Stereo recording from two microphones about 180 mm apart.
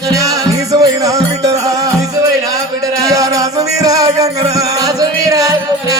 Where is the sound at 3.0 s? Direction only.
20° right (ahead or behind).